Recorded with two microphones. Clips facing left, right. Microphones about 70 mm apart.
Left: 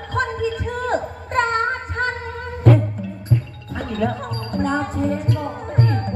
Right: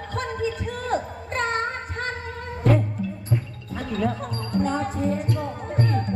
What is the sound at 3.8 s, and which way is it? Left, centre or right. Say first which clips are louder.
Music: left 3 dB; left.